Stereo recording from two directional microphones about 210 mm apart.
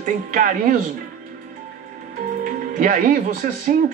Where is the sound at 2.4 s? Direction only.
40° right (ahead or behind).